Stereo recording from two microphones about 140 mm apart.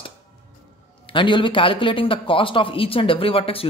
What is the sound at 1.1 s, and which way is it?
A man's voice, 35° left (ahead or behind).